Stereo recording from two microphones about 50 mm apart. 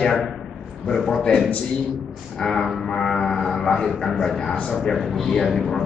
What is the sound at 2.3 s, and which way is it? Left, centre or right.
A man's voice, centre.